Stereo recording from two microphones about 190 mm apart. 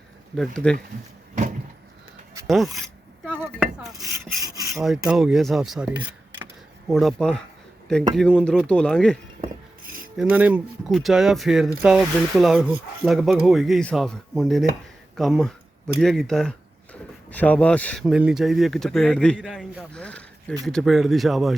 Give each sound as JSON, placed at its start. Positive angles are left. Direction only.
{"t": 0.3, "sound": "speech", "side_deg": 5}
{"t": 2.5, "sound": "speech", "side_deg": 0}
{"t": 4.7, "sound": "speech", "side_deg": 0}
{"t": 9.4, "sound": "glass", "side_deg": -45}
{"t": 10.2, "sound": "speech", "side_deg": -5}
{"t": 18.0, "sound": "speech", "side_deg": -5}